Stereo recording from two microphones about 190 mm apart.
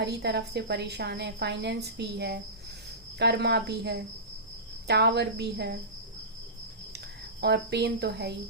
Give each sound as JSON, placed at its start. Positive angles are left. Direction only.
{"t": 0.0, "sound": "a woman's voice", "side_deg": -60}
{"t": 7.4, "sound": "a woman's voice", "side_deg": -60}